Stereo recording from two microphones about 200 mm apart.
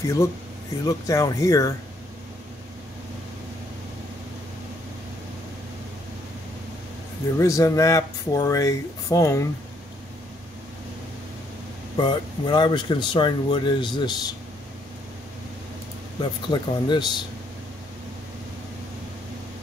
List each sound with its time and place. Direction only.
0.0 s speech: 15° left (ahead or behind)
7.3 s speech: 15° left (ahead or behind)
12.0 s speech: 20° left (ahead or behind)
16.2 s speech: 25° left (ahead or behind)